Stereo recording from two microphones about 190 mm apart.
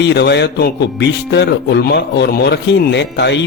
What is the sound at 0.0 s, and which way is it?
A man's voice, 65° left (ahead or behind).